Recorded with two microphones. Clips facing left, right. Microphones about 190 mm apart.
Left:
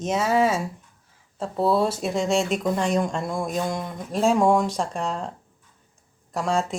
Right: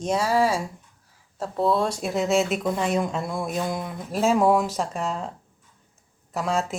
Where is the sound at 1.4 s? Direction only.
5° left (ahead or behind).